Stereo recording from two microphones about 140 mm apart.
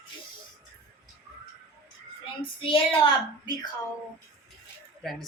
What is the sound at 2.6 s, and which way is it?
A woman's voice, 40° left (ahead or behind).